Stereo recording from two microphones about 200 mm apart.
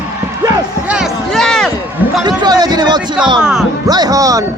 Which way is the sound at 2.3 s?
20° right (ahead or behind).